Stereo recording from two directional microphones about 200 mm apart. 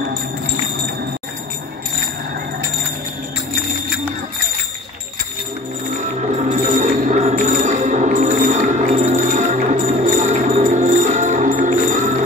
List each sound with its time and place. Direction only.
5.9 s music: 35° right (ahead or behind)